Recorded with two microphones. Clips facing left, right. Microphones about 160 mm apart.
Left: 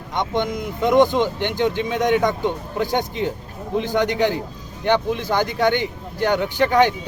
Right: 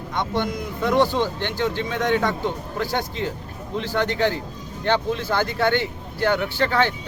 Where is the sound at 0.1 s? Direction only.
20° left (ahead or behind).